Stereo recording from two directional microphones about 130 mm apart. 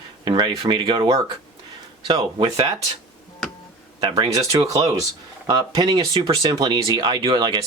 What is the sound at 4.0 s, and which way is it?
Speech, 35° right (ahead or behind).